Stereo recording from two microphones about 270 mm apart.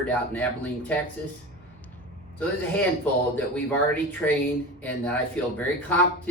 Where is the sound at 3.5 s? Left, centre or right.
Centre.